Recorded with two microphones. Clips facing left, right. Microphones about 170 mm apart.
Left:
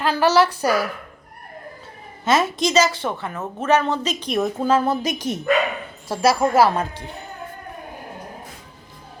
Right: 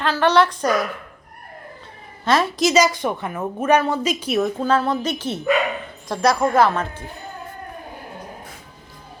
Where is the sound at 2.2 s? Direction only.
Centre (ahead or behind).